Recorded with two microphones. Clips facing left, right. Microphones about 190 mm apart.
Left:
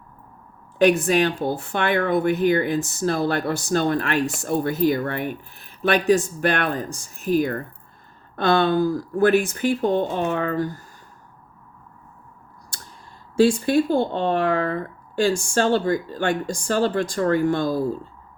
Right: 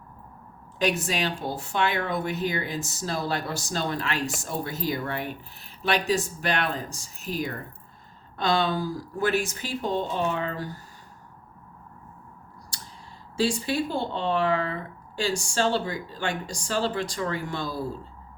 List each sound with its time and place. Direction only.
0.8 s speech: 55° left (ahead or behind)
12.7 s clicking: 50° left (ahead or behind)
13.3 s speech: 55° left (ahead or behind)